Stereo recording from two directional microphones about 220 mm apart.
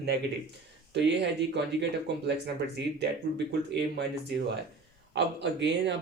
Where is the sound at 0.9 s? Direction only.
50° right (ahead or behind).